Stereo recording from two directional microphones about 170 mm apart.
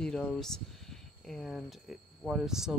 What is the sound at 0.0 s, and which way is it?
Speech, 5° left (ahead or behind).